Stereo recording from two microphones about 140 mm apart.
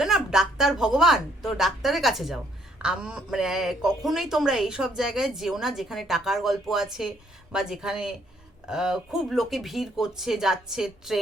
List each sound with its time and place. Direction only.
0.0 s a woman's voice: 5° right (ahead or behind)